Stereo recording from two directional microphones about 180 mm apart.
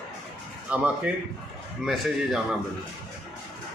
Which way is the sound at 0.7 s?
5° right (ahead or behind).